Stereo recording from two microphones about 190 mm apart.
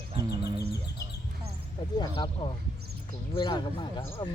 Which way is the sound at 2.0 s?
25° left (ahead or behind).